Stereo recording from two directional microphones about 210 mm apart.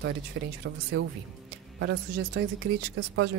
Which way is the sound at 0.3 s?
55° right (ahead or behind).